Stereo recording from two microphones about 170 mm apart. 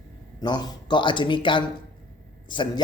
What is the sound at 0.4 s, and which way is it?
Speech, 25° left (ahead or behind).